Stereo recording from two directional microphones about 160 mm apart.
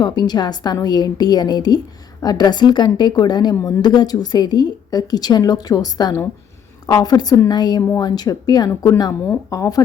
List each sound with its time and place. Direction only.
0.0 s a woman's voice: 25° left (ahead or behind)